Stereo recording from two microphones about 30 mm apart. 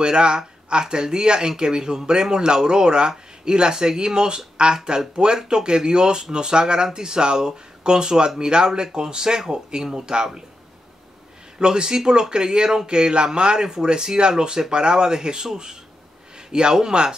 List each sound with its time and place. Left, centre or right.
0.0 s speech: right
11.5 s speech: right
16.3 s a sound: right
16.9 s speech: right